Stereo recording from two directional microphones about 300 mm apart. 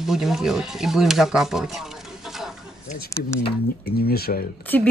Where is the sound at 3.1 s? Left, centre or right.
Centre.